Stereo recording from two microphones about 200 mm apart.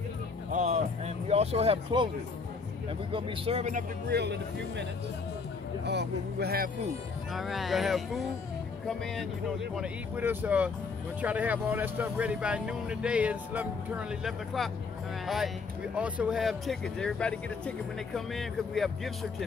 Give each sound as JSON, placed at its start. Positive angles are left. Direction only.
{"t": 0.5, "sound": "music", "side_deg": -35}
{"t": 3.1, "sound": "speech", "side_deg": -25}
{"t": 4.1, "sound": "speech", "side_deg": -55}
{"t": 5.9, "sound": "speech", "side_deg": -55}
{"t": 7.3, "sound": "speech", "side_deg": 0}